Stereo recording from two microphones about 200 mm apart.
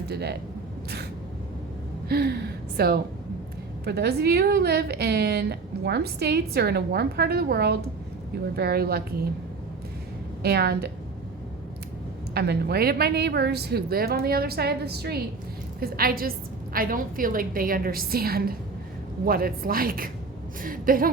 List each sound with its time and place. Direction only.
0.1 s a woman's voice: 55° right (ahead or behind)
2.0 s a woman's voice: 50° right (ahead or behind)
10.4 s a woman's voice: 55° right (ahead or behind)
12.3 s a woman's voice: 50° right (ahead or behind)